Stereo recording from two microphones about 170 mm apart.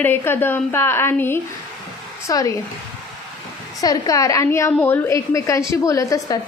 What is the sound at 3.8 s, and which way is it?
A woman's voice, 20° left (ahead or behind).